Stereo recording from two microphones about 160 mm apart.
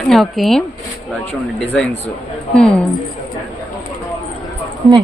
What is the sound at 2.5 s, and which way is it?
Speech, 5° left (ahead or behind).